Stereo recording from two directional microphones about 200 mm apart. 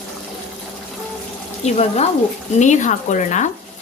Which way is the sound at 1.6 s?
30° left (ahead or behind).